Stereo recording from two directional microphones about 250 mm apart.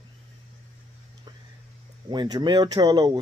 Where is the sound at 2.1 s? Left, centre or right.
Centre.